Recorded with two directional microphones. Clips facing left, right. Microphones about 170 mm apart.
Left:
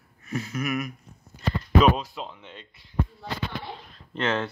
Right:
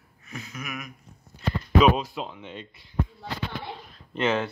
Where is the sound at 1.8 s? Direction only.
5° right (ahead or behind).